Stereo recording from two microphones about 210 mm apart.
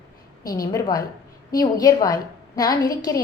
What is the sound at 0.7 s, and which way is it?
A woman's voice, 15° left (ahead or behind).